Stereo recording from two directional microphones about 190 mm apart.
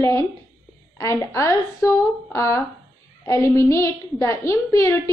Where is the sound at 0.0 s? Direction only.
15° left (ahead or behind).